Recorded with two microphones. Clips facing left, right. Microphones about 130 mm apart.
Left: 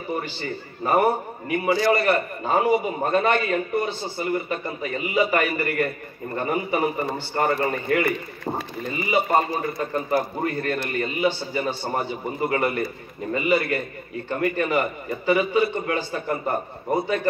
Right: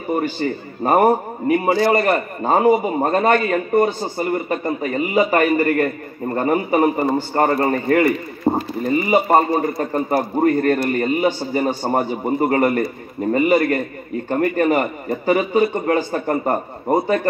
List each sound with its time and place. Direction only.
0.4 s a man's voice: 40° right (ahead or behind)
8.5 s clip-clop: 40° right (ahead or behind)
8.8 s a man's voice: 40° right (ahead or behind)